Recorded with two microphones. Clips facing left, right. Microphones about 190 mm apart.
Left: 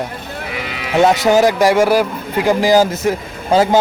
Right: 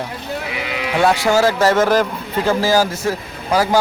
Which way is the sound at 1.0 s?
20° left (ahead or behind).